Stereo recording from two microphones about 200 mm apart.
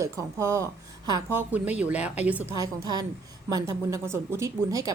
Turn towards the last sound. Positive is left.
turn(degrees=-15)  # may be behind; listen again after turning